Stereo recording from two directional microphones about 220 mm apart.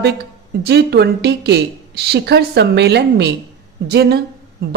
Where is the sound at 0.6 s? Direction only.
50° right (ahead or behind).